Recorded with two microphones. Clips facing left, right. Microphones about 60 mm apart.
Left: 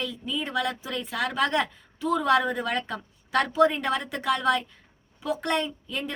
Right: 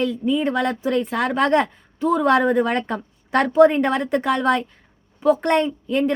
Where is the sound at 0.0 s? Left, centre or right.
Right.